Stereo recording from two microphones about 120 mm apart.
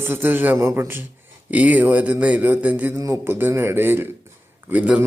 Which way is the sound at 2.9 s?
25° right (ahead or behind).